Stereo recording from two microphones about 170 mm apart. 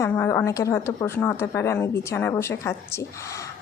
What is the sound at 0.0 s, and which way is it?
Speech, 15° left (ahead or behind).